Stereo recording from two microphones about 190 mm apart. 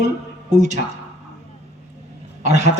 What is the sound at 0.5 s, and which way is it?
Speech, 40° right (ahead or behind).